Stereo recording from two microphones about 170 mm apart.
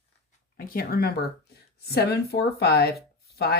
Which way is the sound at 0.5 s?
60° left (ahead or behind).